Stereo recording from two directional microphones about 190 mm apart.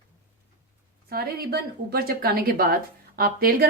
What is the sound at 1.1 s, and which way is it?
A woman's voice, 55° right (ahead or behind).